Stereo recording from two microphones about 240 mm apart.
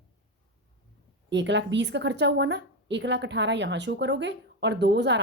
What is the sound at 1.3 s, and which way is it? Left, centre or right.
A woman's voice, right.